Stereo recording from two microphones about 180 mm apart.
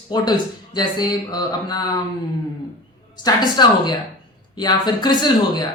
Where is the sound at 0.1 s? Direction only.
25° left (ahead or behind).